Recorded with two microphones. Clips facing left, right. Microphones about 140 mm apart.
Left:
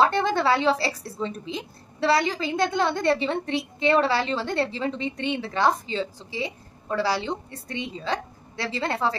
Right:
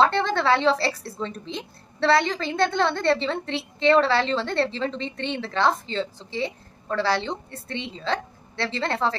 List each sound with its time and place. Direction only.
0.0 s a woman's voice: 10° left (ahead or behind)